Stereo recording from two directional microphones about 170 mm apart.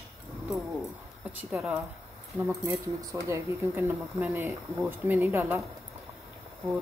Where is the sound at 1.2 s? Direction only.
10° right (ahead or behind).